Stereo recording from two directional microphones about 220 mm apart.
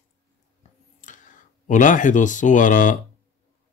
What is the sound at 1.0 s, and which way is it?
Speech, 35° left (ahead or behind).